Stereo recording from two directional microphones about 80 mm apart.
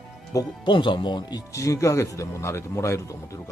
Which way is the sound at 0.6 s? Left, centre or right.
Left.